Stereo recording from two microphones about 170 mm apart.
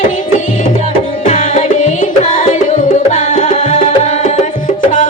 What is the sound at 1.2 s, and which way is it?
Music, 45° left (ahead or behind).